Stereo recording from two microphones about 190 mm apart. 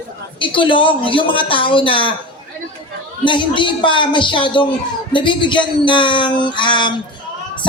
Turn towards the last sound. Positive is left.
turn(degrees=25)  # may be behind; listen again after turning